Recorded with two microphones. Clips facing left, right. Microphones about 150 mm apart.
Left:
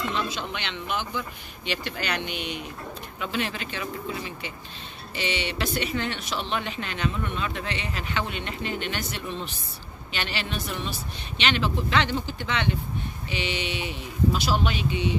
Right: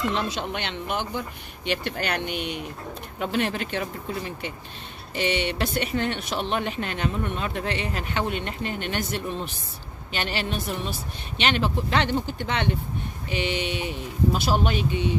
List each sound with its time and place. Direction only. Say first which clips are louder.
0.1 s speech: right 2 dB; 65° right (ahead or behind)
5.1 s speech: right 4 dB; 55° right (ahead or behind)